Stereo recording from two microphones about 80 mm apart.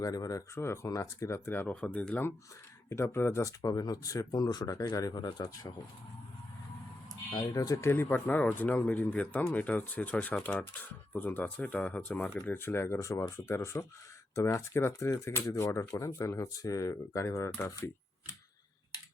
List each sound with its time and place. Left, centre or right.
0.0 s speech: left
0.6 s speech: left
1.5 s speech: left
1.7 s speech: centre
2.9 s speech: left
3.6 s speech: left
7.3 s speech: left
7.9 s speech: left
12.3 s speech: left